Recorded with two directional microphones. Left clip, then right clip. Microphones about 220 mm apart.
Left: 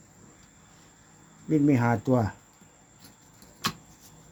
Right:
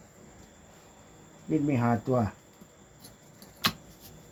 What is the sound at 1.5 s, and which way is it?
Speech, 50° left (ahead or behind).